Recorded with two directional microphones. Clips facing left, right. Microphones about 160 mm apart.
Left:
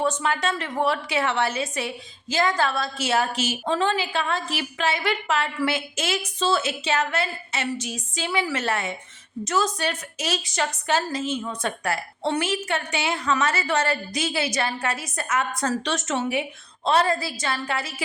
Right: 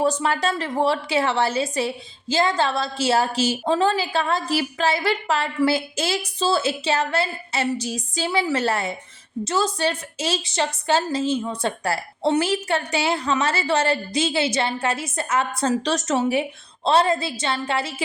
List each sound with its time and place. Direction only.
0.0 s a woman's voice: 35° right (ahead or behind)